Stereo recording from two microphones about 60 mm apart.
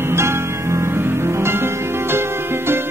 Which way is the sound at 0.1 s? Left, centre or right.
Right.